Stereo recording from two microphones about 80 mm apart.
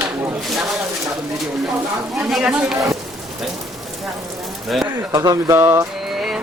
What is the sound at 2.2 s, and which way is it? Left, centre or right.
Speech, centre.